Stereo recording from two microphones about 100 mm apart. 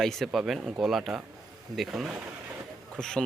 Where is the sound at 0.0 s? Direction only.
Centre (ahead or behind).